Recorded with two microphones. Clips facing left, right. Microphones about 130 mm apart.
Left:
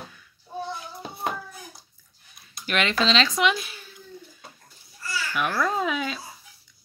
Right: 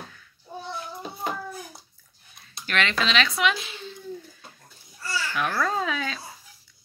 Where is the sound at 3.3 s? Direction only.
15° left (ahead or behind).